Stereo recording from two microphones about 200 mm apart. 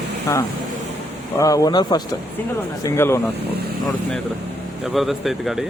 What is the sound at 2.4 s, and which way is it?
Speech, 10° left (ahead or behind).